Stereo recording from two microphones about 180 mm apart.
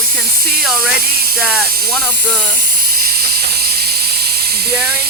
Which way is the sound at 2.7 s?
55° right (ahead or behind).